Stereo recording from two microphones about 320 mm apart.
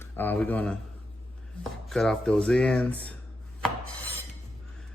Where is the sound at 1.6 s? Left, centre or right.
Centre.